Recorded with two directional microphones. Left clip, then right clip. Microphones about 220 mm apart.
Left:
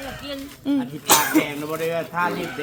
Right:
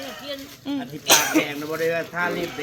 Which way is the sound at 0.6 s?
55° left (ahead or behind).